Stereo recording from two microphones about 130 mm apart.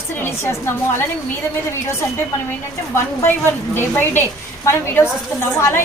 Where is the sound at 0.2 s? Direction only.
20° left (ahead or behind).